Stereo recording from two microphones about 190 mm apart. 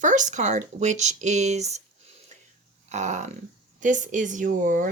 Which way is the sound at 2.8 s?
40° right (ahead or behind).